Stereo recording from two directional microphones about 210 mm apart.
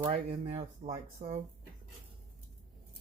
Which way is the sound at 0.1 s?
30° right (ahead or behind).